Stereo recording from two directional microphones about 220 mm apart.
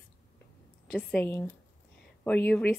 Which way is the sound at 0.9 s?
5° left (ahead or behind).